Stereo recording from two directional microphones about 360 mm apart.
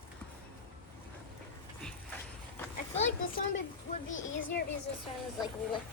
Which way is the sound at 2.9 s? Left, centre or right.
Left.